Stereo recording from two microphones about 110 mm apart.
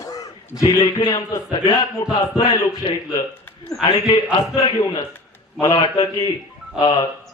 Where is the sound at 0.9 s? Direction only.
50° left (ahead or behind).